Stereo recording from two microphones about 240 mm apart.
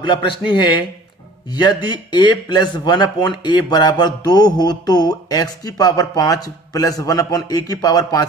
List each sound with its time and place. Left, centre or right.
0.5 s speech: centre